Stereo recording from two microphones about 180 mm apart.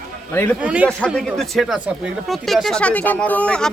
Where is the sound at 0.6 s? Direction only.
5° right (ahead or behind).